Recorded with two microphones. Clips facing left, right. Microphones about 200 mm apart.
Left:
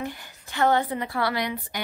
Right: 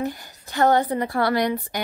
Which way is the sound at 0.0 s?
40° right (ahead or behind).